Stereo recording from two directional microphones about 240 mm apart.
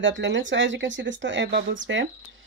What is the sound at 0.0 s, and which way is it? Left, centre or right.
Speech, right.